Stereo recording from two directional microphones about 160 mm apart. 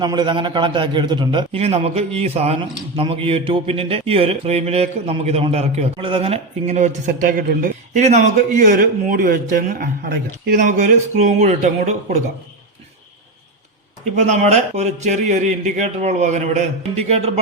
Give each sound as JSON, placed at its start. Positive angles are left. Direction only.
{"t": 0.0, "sound": "a man's voice", "side_deg": -25}
{"t": 14.2, "sound": "speech", "side_deg": -45}